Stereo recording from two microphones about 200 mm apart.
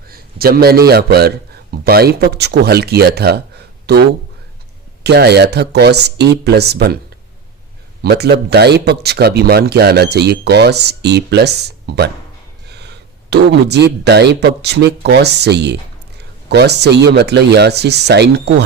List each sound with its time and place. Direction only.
0.1 s a sound: 50° right (ahead or behind)
0.9 s speech: 50° right (ahead or behind)
5.0 s speech: 55° right (ahead or behind)
8.0 s speech: 50° right (ahead or behind)
12.6 s a sound: 55° right (ahead or behind)
13.3 s speech: 55° right (ahead or behind)